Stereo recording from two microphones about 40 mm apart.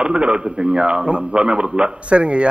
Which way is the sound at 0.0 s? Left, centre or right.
Right.